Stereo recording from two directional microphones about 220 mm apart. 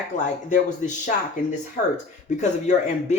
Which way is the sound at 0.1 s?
35° left (ahead or behind).